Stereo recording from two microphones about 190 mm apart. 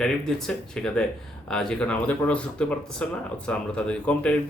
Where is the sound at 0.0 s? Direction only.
5° left (ahead or behind).